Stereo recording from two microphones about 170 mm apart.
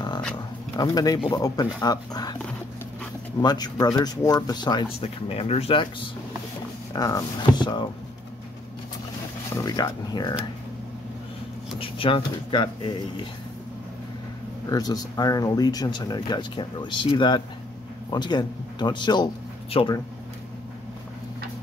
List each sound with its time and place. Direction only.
0.7 s speech: 25° left (ahead or behind)
3.4 s speech: 25° left (ahead or behind)
5.0 s speech: 35° left (ahead or behind)
6.9 s speech: 20° left (ahead or behind)
9.6 s speech: 20° left (ahead or behind)
11.8 s speech: 30° left (ahead or behind)
14.7 s speech: 20° left (ahead or behind)